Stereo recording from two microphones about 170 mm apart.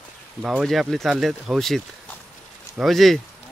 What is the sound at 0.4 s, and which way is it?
Speech, 5° right (ahead or behind).